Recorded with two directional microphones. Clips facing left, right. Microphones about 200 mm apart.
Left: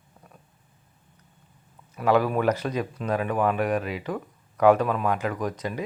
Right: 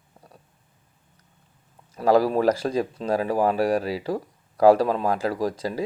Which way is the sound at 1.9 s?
35° right (ahead or behind).